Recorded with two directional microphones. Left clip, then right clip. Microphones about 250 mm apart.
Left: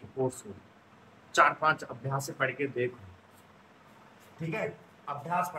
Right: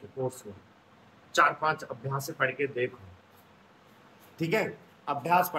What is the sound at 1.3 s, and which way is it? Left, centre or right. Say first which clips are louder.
Speech: even; centre.